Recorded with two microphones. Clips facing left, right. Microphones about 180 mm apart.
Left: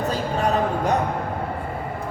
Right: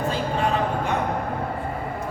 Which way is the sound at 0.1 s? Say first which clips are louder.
Left 2 dB; 40° left (ahead or behind).